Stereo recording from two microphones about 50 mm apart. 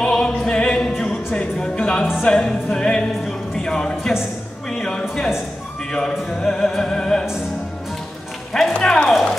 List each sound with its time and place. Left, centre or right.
0.0 s opera: centre
1.3 s music: centre
3.3 s speech: centre
4.6 s music: centre
8.7 s a sound: centre